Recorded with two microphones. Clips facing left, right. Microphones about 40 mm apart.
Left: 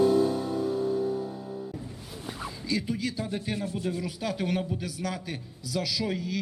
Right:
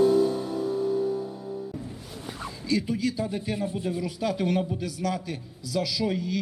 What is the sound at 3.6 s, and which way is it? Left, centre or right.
Speech, right.